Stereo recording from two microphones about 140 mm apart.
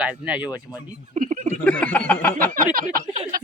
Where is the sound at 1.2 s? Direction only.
70° right (ahead or behind).